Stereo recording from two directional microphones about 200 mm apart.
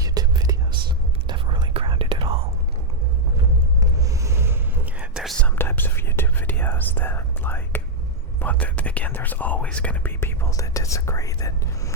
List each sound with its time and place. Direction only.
0.0 s music: 20° right (ahead or behind)
1.3 s whispering: 25° right (ahead or behind)
3.8 s whispering: 15° right (ahead or behind); by 11.9 s 15° left (ahead or behind)